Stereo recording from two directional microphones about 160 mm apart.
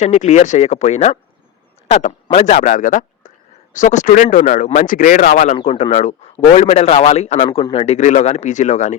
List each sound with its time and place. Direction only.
0.0 s speech: 50° left (ahead or behind)